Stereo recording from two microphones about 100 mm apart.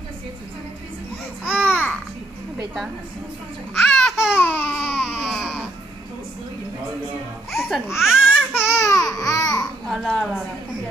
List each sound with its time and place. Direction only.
1.4 s babbling: 15° left (ahead or behind)
3.7 s babbling: centre (ahead or behind)
4.4 s a sound: 20° left (ahead or behind)
4.9 s baby cry: 5° right (ahead or behind)
7.5 s laughter: centre (ahead or behind)
8.0 s speech: 5° right (ahead or behind)
8.4 s a sound: 20° left (ahead or behind); by 9.7 s 35° left (ahead or behind)
9.8 s a woman's voice: centre (ahead or behind)